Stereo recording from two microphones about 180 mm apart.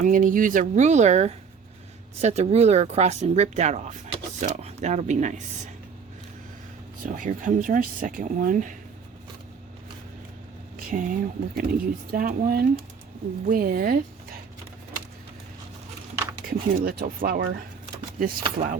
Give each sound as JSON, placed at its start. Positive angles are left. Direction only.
{"t": 0.0, "sound": "speech", "side_deg": -45}
{"t": 7.0, "sound": "speech", "side_deg": -45}
{"t": 10.8, "sound": "speech", "side_deg": -50}
{"t": 16.5, "sound": "speech", "side_deg": -55}